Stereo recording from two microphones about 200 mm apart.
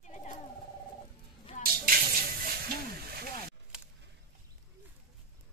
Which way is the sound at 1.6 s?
45° right (ahead or behind).